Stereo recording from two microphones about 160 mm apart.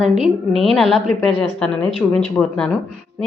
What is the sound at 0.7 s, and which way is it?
A woman's voice, centre (ahead or behind).